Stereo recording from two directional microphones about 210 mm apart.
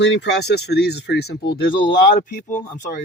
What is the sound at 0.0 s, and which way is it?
Speech, 55° left (ahead or behind).